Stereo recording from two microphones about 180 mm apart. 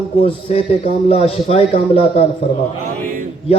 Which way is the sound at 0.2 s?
35° left (ahead or behind).